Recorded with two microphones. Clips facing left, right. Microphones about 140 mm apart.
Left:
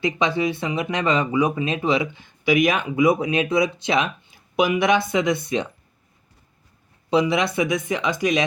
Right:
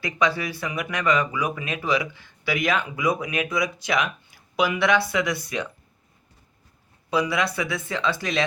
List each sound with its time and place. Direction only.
0.0 s speech: 20° left (ahead or behind)
7.1 s speech: 20° left (ahead or behind)